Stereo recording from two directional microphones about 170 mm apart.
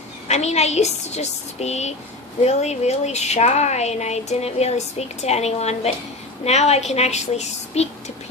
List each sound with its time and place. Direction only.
0.3 s speech: 40° left (ahead or behind)